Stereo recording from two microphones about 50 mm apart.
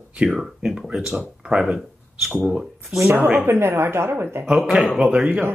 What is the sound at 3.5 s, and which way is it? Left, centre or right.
Speech, right.